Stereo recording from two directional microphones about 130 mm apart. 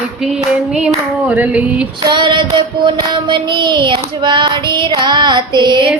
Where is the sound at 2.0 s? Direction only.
35° right (ahead or behind).